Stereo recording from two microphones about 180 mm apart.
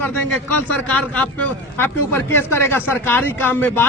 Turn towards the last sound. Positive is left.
turn(degrees=10)  # may be behind; listen again after turning